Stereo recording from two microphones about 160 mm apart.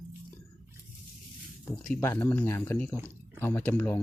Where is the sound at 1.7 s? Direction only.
10° left (ahead or behind).